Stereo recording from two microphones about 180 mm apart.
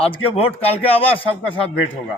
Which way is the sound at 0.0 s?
30° left (ahead or behind).